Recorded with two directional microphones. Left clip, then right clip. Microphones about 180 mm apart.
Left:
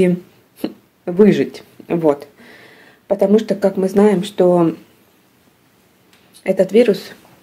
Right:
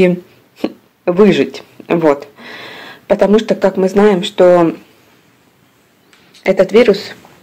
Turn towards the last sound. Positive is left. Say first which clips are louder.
# right 4 dB
turn(degrees=5)  # may be behind; listen again after turning